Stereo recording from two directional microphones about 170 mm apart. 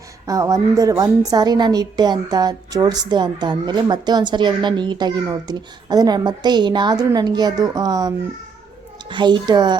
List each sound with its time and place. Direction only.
0.3 s a woman's voice: 20° right (ahead or behind)